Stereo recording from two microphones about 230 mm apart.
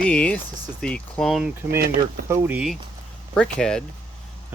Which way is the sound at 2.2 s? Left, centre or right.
Centre.